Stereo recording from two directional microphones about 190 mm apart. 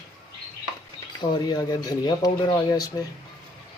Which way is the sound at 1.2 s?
20° left (ahead or behind).